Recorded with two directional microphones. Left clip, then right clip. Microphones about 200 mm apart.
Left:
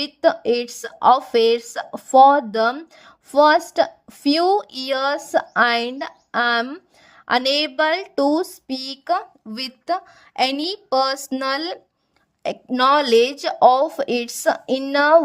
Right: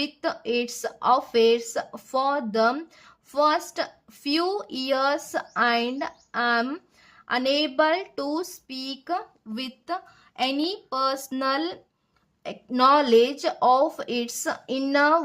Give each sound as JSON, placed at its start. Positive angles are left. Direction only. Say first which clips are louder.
{"t": 0.0, "sound": "speech", "louder": "left 10 dB", "side_deg": 35}